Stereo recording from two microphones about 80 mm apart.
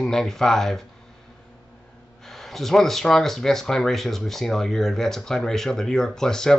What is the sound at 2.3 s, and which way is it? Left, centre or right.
Speech, centre.